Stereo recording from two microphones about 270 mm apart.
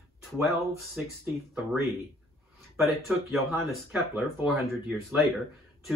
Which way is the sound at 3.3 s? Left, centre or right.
Centre.